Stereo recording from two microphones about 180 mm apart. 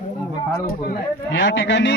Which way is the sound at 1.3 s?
90° left.